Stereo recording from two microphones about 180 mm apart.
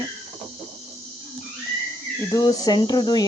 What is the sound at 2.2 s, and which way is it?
Speech, 20° left (ahead or behind).